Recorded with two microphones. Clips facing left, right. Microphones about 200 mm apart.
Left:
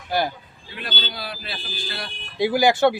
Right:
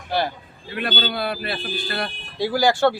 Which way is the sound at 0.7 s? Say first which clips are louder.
Right 7 dB; 60° right (ahead or behind).